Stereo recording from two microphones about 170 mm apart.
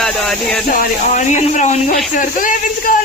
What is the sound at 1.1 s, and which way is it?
A man's voice, 45° left (ahead or behind).